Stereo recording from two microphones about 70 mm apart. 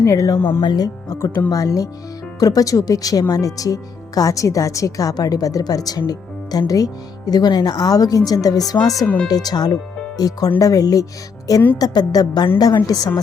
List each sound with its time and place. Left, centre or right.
0.0 s speech: left
0.3 s speech: left
0.6 s speech: left
1.1 s speech: left
9.2 s a woman's voice: left
10.2 s speech: left
11.8 s a woman's voice: left
12.5 s a woman's voice: left